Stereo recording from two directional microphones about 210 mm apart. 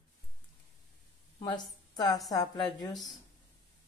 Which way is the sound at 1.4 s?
20° left (ahead or behind).